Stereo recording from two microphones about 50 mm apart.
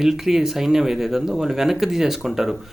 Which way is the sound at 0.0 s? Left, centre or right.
Centre.